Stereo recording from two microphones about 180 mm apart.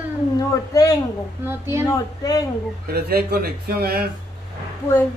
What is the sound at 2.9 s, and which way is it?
Speech, 60° right (ahead or behind).